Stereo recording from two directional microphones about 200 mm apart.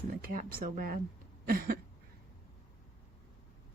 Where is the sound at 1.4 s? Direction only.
45° right (ahead or behind).